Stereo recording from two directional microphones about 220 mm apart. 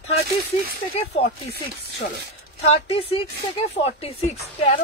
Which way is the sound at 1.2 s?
50° left (ahead or behind).